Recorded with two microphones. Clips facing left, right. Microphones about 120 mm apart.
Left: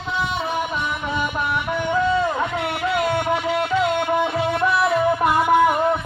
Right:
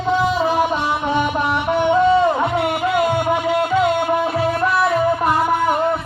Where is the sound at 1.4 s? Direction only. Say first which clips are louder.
Right 6 dB; 75° right (ahead or behind).